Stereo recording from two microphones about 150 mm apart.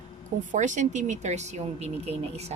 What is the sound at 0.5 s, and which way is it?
Speech, 55° right (ahead or behind).